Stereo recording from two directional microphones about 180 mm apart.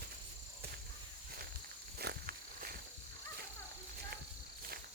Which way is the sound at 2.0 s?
60° right (ahead or behind).